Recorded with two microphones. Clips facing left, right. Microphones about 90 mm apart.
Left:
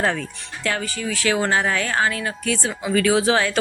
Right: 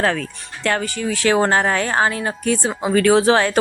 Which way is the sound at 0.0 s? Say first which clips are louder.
Right 3 dB; 85° right.